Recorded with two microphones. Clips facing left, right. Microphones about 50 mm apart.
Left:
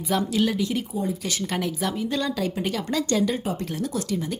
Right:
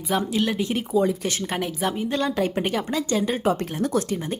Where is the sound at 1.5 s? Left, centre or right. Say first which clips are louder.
Even; right.